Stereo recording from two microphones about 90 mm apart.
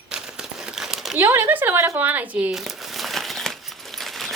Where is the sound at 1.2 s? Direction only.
25° right (ahead or behind).